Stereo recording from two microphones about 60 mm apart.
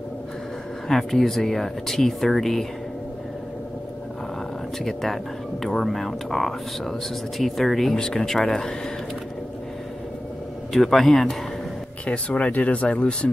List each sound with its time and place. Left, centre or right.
0.8 s speech: centre
4.8 s speech: centre
10.7 s speech: centre
12.1 s speech: centre